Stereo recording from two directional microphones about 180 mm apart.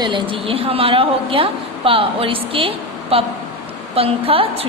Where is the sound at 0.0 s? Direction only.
30° right (ahead or behind).